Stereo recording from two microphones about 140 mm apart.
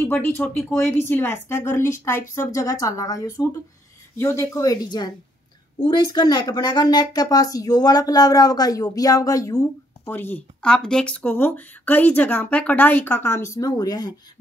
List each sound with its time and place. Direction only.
0.0 s speech: 15° left (ahead or behind)
10.1 s speech: 15° left (ahead or behind); by 14.1 s 30° left (ahead or behind)